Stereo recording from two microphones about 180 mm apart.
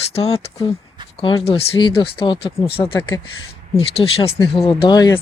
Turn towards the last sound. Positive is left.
turn(degrees=25)  # may be behind; listen again after turning